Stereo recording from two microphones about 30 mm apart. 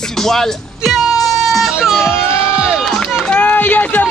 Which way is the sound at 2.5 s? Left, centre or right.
Right.